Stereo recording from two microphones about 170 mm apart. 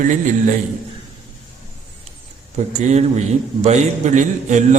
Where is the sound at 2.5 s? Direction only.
40° right (ahead or behind).